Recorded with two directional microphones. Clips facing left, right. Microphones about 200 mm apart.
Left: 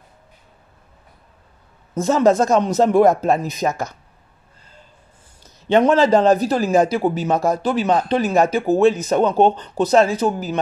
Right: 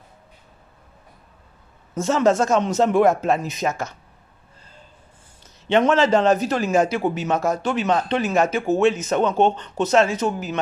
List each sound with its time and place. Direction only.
2.0 s a man's voice: 35° left (ahead or behind)
5.7 s a man's voice: 35° left (ahead or behind)